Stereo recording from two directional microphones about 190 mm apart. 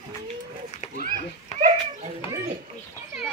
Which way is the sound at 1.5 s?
35° left (ahead or behind).